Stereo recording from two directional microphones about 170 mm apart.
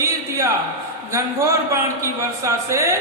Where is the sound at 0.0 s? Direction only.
20° right (ahead or behind).